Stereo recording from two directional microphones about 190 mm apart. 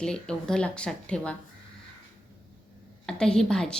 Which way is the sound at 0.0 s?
5° left (ahead or behind).